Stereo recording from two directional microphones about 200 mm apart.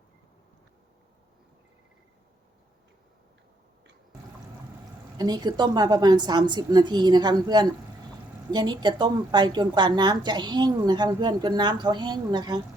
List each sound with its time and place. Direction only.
5.1 s a woman's voice: 20° right (ahead or behind)